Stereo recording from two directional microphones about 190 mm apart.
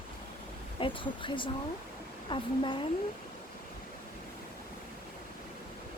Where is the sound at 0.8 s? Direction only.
25° left (ahead or behind).